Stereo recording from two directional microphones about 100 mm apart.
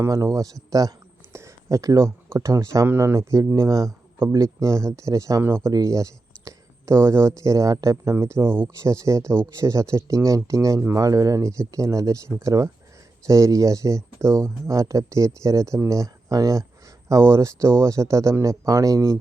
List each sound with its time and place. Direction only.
0.0 s speech: 35° right (ahead or behind)